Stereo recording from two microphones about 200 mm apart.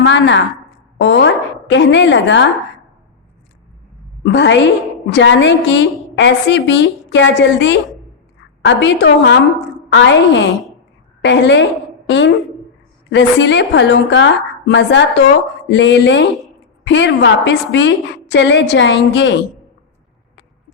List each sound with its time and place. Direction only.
0.0 s a woman's voice: 65° left (ahead or behind)
4.2 s a woman's voice: 60° left (ahead or behind)
10.5 s speech: centre (ahead or behind)
11.2 s a woman's voice: 60° left (ahead or behind)